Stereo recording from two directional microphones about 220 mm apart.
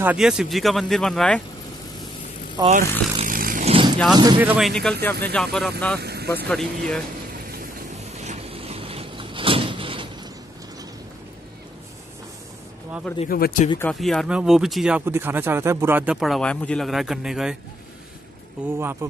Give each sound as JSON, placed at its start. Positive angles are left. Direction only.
{"t": 0.0, "sound": "speech", "side_deg": -5}
{"t": 2.6, "sound": "vehicle", "side_deg": -35}
{"t": 4.1, "sound": "speech", "side_deg": -20}
{"t": 4.4, "sound": "speech", "side_deg": -5}
{"t": 5.9, "sound": "speech", "side_deg": -45}
{"t": 6.3, "sound": "speech", "side_deg": 5}
{"t": 8.1, "sound": "vehicle", "side_deg": -30}
{"t": 13.3, "sound": "speech", "side_deg": 40}
{"t": 13.8, "sound": "speech", "side_deg": 0}
{"t": 18.8, "sound": "speech", "side_deg": -10}